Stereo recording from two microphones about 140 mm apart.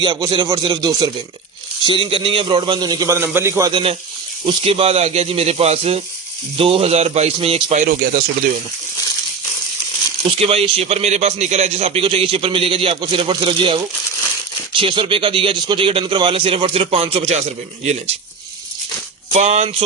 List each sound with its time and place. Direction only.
0.0 s speech: 30° right (ahead or behind)
3.7 s speech: 35° right (ahead or behind); by 7.9 s 55° right (ahead or behind)
10.2 s speech: 45° right (ahead or behind)
19.3 s speech: 55° right (ahead or behind)